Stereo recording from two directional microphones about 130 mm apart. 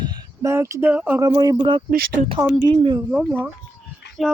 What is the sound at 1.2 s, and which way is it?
Speech, 30° right (ahead or behind).